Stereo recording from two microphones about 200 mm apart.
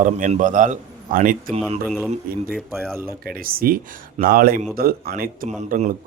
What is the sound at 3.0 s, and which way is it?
Speech, 45° right (ahead or behind).